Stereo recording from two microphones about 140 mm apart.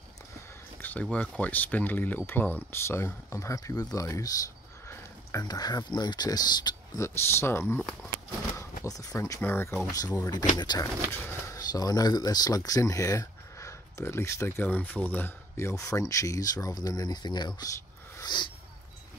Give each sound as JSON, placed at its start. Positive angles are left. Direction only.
{"t": 1.1, "sound": "speech", "side_deg": 10}
{"t": 7.2, "sound": "speech", "side_deg": 15}
{"t": 8.8, "sound": "speech", "side_deg": 25}
{"t": 9.9, "sound": "speech", "side_deg": 25}
{"t": 18.1, "sound": "a sound", "side_deg": 30}